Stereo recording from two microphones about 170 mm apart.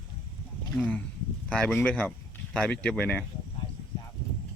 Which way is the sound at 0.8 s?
10° left (ahead or behind).